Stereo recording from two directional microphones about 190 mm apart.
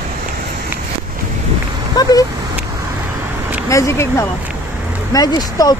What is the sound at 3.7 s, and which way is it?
Speech, 15° left (ahead or behind).